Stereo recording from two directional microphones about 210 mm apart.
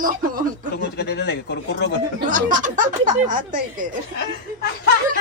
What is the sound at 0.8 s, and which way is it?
Speech, 50° left (ahead or behind).